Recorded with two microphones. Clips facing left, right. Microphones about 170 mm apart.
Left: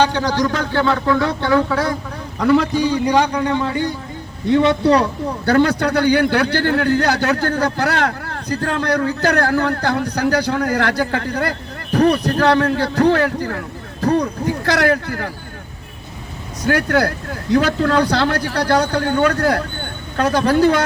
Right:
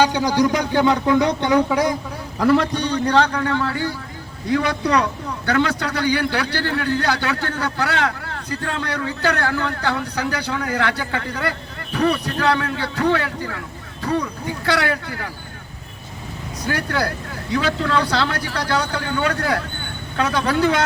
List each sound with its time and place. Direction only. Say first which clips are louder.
0.0 s speech: even; 10° right (ahead or behind)
2.4 s a man's voice: left 2 dB; centre (ahead or behind); by 5.0 s 30° left (ahead or behind)
5.5 s a man's voice: left 5 dB; 40° left (ahead or behind)
16.6 s a man's voice: left 6 dB; 55° left (ahead or behind)
18.9 s speech: left 6 dB; 50° left (ahead or behind)